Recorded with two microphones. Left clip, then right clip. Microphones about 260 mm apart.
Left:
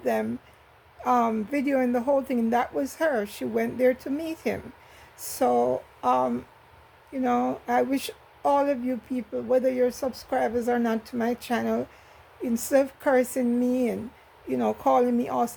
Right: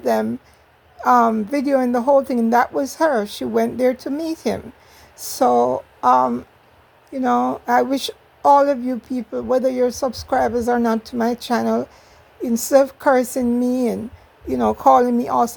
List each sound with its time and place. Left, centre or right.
0.0 s speech: right